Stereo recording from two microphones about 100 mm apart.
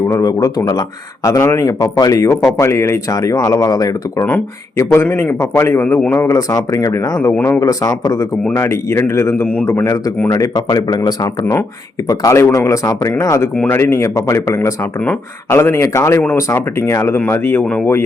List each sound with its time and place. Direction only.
0.1 s speech: 35° left (ahead or behind)
1.4 s speech: 30° left (ahead or behind)
4.8 s speech: 25° left (ahead or behind)
7.3 s speech: 20° left (ahead or behind)
7.6 s speech: 35° left (ahead or behind); by 17.8 s 15° left (ahead or behind)